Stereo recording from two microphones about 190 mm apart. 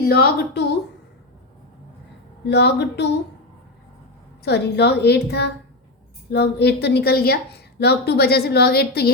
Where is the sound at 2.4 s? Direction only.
65° left (ahead or behind).